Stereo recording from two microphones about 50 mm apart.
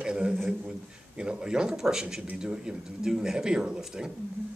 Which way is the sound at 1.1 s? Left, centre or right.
Centre.